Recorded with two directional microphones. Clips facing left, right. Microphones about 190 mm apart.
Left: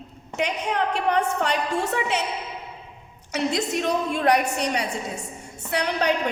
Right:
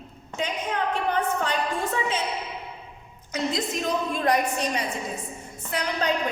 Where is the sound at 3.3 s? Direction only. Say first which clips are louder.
Left 3 dB; 70° left (ahead or behind).